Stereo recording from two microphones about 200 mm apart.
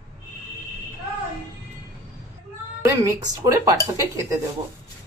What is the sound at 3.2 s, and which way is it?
Speech, 20° right (ahead or behind).